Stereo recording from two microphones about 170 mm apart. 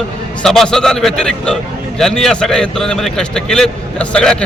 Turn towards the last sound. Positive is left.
turn(degrees=5)  # may be behind; listen again after turning